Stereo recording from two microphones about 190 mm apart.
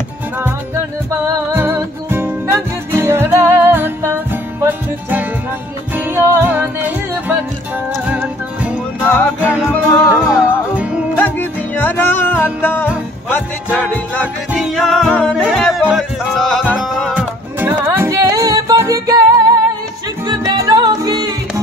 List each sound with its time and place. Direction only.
1.1 s music: 10° right (ahead or behind)
8.1 s music: 10° right (ahead or behind)
9.0 s music: 10° left (ahead or behind)
10.3 s music: 5° right (ahead or behind)
11.1 s music: 10° left (ahead or behind)
14.2 s music: 5° right (ahead or behind)
20.6 s music: 20° right (ahead or behind)